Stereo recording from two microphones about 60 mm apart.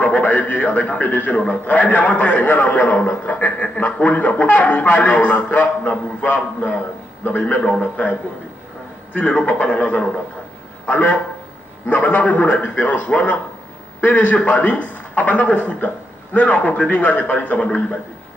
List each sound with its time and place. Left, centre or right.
0.0 s a man's voice: left